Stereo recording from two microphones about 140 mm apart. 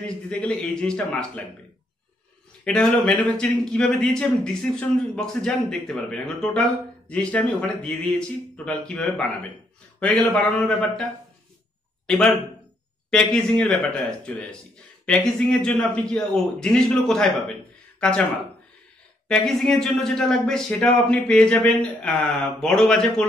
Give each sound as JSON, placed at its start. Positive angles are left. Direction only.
{"t": 0.0, "sound": "speech", "side_deg": 10}
{"t": 2.6, "sound": "speech", "side_deg": 5}
{"t": 12.1, "sound": "speech", "side_deg": 0}
{"t": 19.2, "sound": "speech", "side_deg": 5}